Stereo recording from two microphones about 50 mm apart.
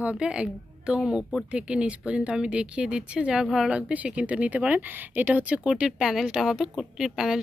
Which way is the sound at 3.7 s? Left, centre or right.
Right.